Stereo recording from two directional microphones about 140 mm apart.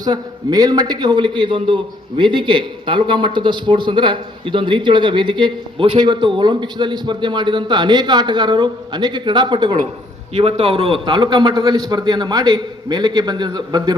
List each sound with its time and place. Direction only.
0.0 s a man's voice: 25° right (ahead or behind)
10.3 s a man's voice: 45° right (ahead or behind); by 13.9 s 30° right (ahead or behind)